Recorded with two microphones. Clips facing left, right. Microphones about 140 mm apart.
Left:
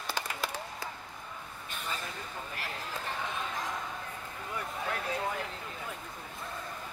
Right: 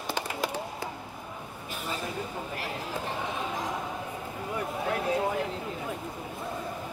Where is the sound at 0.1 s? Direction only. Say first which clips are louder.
Right 5 dB; 15° right (ahead or behind).